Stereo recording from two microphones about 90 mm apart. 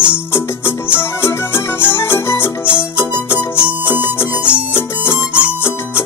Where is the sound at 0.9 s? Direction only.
25° left (ahead or behind).